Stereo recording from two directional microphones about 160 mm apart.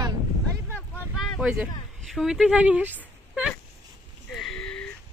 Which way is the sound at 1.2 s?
Centre (ahead or behind).